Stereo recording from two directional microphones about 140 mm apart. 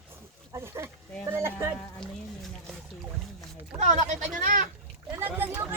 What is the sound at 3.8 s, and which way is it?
Speech, 60° right (ahead or behind).